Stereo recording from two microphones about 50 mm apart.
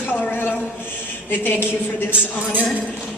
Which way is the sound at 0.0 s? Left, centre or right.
Left.